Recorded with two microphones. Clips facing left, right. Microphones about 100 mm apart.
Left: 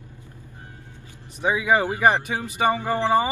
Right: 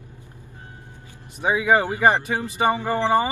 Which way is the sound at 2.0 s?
15° left (ahead or behind).